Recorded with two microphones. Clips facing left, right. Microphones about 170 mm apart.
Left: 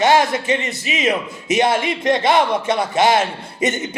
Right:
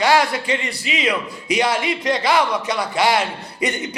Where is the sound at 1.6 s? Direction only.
50° left (ahead or behind).